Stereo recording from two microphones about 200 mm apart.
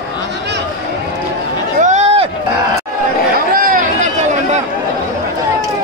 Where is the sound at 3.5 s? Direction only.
45° right (ahead or behind).